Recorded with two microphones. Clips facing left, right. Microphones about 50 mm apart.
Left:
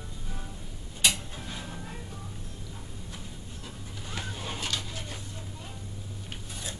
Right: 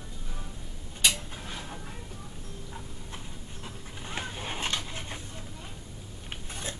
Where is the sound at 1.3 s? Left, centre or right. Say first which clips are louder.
Even; centre.